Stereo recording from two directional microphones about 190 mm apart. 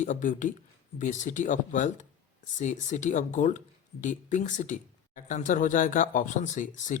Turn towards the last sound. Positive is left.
turn(degrees=40)  # may be behind; listen again after turning